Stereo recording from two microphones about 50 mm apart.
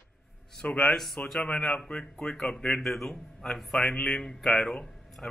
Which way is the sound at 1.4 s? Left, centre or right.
Left.